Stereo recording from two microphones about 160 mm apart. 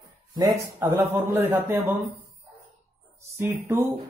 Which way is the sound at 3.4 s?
20° right (ahead or behind).